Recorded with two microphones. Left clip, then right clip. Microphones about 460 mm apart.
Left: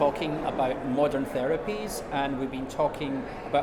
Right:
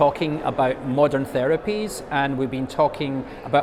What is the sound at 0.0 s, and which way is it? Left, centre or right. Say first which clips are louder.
Speech: right 6 dB; right.